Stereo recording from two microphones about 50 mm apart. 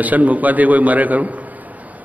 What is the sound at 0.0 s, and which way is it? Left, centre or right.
A man's voice, right.